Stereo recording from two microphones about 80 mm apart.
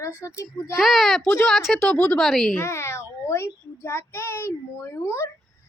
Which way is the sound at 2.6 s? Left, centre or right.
Left.